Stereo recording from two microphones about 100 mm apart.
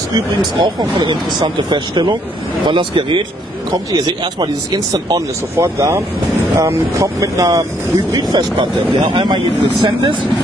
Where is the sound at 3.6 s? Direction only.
45° right (ahead or behind).